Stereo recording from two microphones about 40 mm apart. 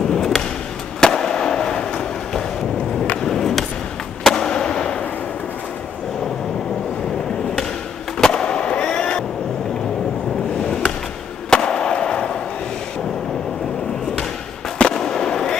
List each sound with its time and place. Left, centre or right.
0.1 s a sound: centre
1.0 s fireworks: centre
3.2 s skateboard: centre
4.2 s fireworks: centre
8.2 s skateboard: centre
11.5 s a sound: centre
14.8 s fireworks: centre